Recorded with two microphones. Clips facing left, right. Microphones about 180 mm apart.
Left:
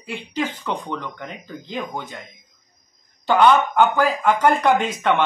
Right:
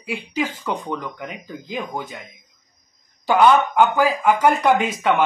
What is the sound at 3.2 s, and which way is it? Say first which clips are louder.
Speech: right 1 dB; 10° right (ahead or behind).